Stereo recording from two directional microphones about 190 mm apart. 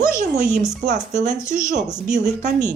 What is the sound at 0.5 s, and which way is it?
Speech, 40° right (ahead or behind).